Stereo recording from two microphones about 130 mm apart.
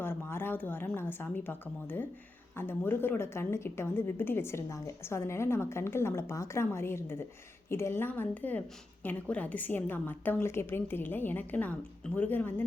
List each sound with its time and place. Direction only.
0.0 s a woman's voice: 15° left (ahead or behind)